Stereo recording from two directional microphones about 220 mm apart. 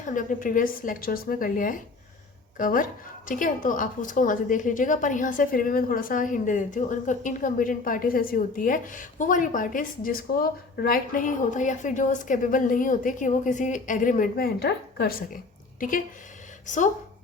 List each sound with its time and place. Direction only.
0.0 s a woman's voice: 35° left (ahead or behind)
16.6 s a woman's voice: 35° left (ahead or behind)